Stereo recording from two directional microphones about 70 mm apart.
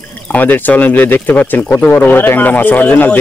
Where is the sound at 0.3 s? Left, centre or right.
Left.